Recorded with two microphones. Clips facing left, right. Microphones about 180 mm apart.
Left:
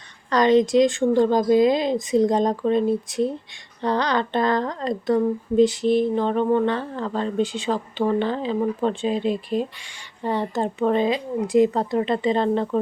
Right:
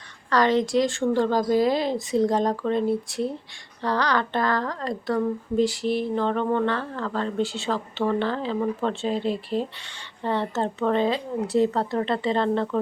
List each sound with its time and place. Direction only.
0.3 s a woman's voice: 20° left (ahead or behind)